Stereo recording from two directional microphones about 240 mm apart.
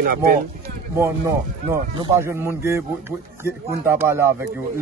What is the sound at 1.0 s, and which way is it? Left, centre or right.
A man's voice, centre.